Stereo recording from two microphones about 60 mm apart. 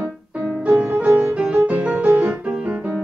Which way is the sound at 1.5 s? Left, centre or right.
Right.